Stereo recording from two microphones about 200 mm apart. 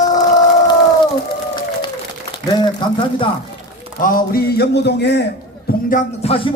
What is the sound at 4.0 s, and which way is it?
A man's voice, 45° left (ahead or behind).